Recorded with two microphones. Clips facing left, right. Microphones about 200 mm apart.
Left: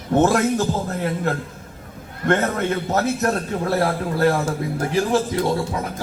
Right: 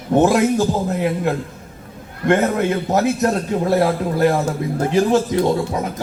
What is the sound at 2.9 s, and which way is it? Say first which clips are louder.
A man's voice: right 3 dB; 15° right (ahead or behind).